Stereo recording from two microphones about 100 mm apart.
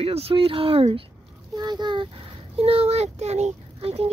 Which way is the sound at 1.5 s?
45° right (ahead or behind).